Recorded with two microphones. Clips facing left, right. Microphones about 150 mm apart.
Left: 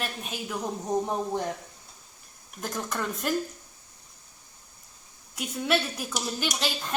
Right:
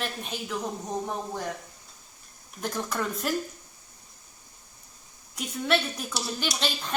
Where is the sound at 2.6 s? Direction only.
Centre (ahead or behind).